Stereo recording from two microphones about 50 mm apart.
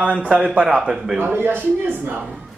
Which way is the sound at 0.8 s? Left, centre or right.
Centre.